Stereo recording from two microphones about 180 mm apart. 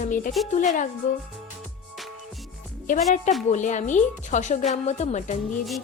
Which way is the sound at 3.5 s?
40° left (ahead or behind).